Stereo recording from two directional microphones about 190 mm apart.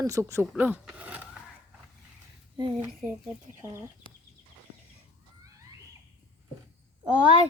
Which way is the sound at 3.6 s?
15° right (ahead or behind).